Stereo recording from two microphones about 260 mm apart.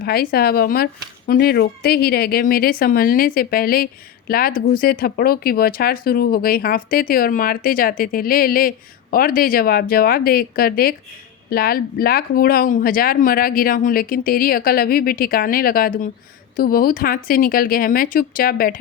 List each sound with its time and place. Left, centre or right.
0.0 s speech: left